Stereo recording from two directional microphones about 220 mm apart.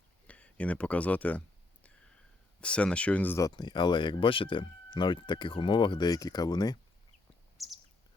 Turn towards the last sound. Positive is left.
turn(degrees=0)  # may be behind; listen again after turning